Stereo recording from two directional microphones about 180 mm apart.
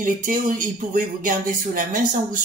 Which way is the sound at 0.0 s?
50° right (ahead or behind).